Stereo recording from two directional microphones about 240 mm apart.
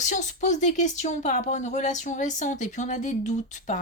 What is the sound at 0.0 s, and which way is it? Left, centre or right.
Speech, left.